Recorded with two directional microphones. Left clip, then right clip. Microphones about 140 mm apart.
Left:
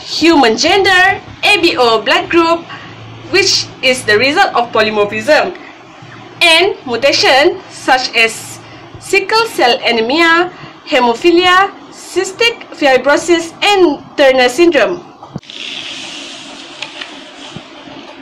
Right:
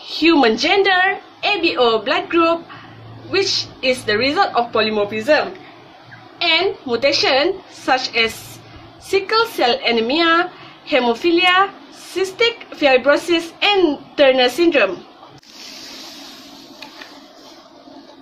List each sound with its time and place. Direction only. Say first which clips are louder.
0.0 s a woman's voice: left 5 dB; 85° right; by 5.4 s 65° right (ahead or behind)
6.4 s a woman's voice: left 8 dB; 80° right